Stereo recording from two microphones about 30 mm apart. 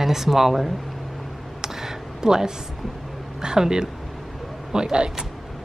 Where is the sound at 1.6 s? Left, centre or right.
Centre.